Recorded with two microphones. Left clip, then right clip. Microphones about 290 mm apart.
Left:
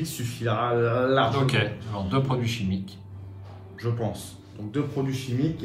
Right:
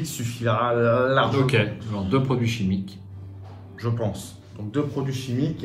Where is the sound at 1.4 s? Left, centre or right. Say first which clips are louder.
Right 3 dB; centre.